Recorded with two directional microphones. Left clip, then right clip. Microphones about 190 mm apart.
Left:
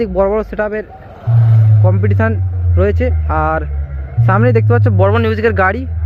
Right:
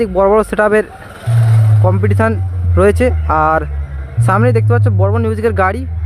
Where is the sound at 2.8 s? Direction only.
30° right (ahead or behind).